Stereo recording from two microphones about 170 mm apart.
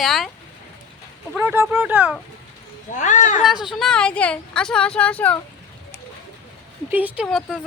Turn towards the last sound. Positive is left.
turn(degrees=0)  # may be behind; listen again after turning